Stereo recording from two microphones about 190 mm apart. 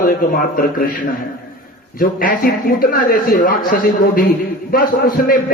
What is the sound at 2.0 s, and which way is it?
A man's voice, 50° left (ahead or behind).